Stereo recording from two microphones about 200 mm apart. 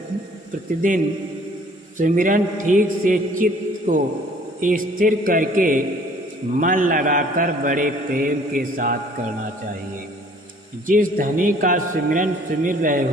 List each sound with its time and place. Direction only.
2.0 s a man's voice: 40° right (ahead or behind)
10.8 s a man's voice: 40° right (ahead or behind)